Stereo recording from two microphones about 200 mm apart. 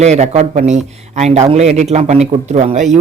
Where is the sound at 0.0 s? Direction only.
35° right (ahead or behind).